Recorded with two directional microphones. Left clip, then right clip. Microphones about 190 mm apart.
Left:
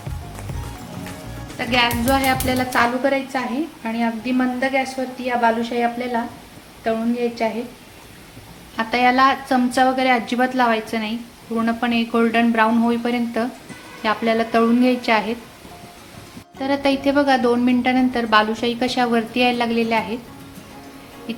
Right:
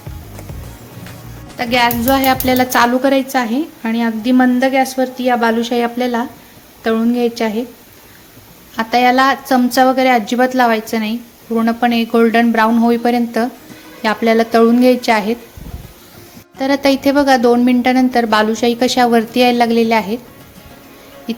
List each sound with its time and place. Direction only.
1.5 s a woman's voice: 35° right (ahead or behind); by 7.5 s 55° right (ahead or behind)
8.7 s a woman's voice: 30° right (ahead or behind)
16.6 s a woman's voice: 35° right (ahead or behind)
21.3 s a woman's voice: 30° right (ahead or behind)